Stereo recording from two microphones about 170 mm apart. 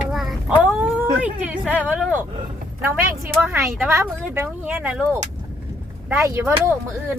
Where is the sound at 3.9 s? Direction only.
10° right (ahead or behind).